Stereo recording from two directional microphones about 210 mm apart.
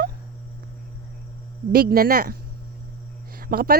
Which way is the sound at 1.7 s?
45° right (ahead or behind).